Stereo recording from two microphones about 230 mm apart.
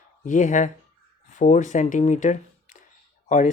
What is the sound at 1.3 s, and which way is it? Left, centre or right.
Speech, left.